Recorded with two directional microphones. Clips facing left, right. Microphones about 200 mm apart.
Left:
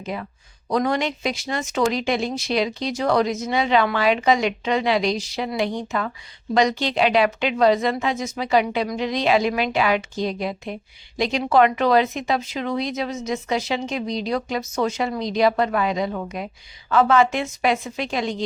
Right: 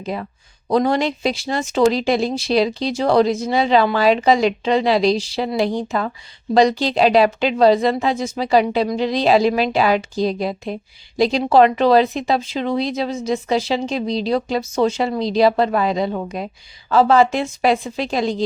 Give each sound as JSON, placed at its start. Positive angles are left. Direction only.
{"t": 0.0, "sound": "speech", "side_deg": -35}